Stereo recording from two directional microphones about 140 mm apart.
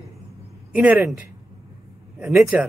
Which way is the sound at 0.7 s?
10° right (ahead or behind).